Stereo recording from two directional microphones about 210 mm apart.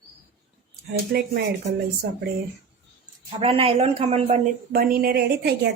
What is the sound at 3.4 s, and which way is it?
Speech, 25° right (ahead or behind).